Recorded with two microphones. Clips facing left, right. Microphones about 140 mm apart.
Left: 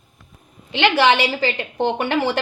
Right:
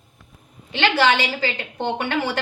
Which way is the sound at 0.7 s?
20° left (ahead or behind).